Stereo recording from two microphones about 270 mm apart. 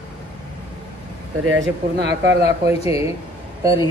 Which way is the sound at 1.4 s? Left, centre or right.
Right.